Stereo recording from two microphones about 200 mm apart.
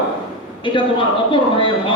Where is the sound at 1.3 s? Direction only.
25° left (ahead or behind).